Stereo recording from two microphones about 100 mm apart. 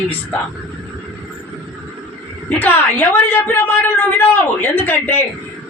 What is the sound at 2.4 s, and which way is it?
A woman's voice, 20° left (ahead or behind).